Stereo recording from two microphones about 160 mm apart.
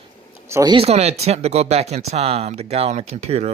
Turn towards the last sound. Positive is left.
turn(degrees=-45)  # may be behind; listen again after turning